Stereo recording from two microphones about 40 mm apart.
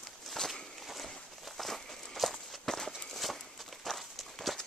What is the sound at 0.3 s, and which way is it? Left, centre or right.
Walk, centre.